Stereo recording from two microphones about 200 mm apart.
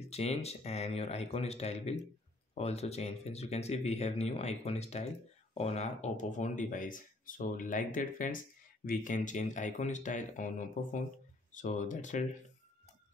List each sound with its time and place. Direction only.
0.1 s speech: 30° left (ahead or behind)